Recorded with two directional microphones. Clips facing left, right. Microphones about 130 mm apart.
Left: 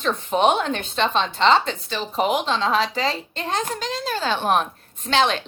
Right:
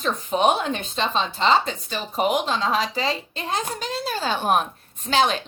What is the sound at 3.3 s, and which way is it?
Speech, 10° right (ahead or behind).